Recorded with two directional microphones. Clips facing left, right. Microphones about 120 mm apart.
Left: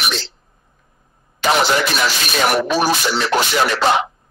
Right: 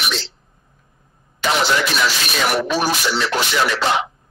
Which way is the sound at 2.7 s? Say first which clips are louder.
Left 2 dB; 45° left (ahead or behind).